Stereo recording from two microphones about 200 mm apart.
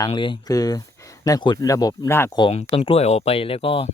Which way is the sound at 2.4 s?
30° left (ahead or behind).